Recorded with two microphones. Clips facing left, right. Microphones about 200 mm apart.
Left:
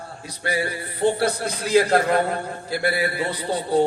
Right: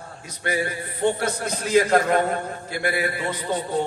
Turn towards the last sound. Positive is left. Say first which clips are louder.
# left 2 dB
turn(degrees=35)  # may be behind; listen again after turning